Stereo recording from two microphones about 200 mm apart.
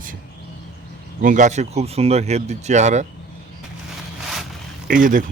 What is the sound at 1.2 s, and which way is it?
Speech, 40° right (ahead or behind).